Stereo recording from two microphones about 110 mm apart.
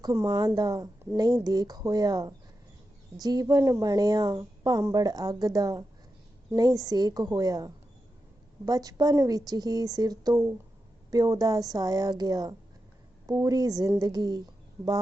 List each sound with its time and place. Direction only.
0.0 s a woman's voice: 30° right (ahead or behind)